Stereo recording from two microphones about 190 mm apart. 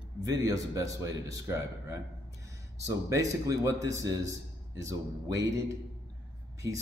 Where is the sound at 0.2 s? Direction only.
15° right (ahead or behind).